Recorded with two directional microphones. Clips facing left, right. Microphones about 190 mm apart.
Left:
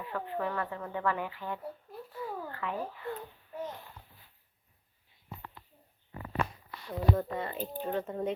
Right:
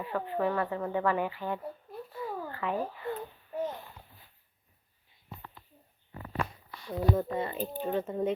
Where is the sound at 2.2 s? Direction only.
20° right (ahead or behind).